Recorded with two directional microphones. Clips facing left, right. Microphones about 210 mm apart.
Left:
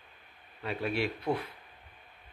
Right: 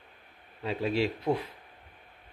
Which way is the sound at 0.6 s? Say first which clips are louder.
Right 3 dB; 25° right (ahead or behind).